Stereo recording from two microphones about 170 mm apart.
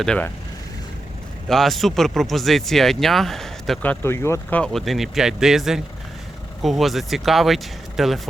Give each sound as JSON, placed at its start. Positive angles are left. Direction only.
{"t": 0.0, "sound": "speech", "side_deg": 5}
{"t": 1.5, "sound": "speech", "side_deg": 0}
{"t": 4.0, "sound": "speech", "side_deg": 15}